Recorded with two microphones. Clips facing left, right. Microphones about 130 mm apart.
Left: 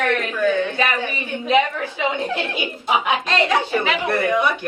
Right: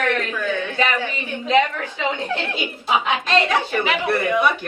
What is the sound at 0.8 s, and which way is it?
A man's voice, 15° left (ahead or behind).